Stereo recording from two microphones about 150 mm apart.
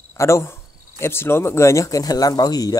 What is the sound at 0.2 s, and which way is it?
Speech, 20° left (ahead or behind).